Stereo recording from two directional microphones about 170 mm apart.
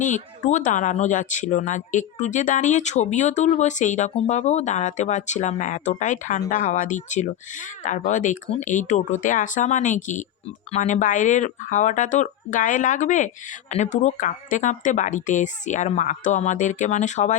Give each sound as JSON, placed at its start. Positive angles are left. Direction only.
{"t": 0.0, "sound": "speech", "side_deg": 45}